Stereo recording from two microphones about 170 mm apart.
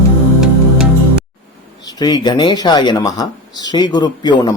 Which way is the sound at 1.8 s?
25° left (ahead or behind).